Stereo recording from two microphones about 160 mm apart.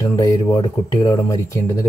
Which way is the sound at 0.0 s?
20° left (ahead or behind).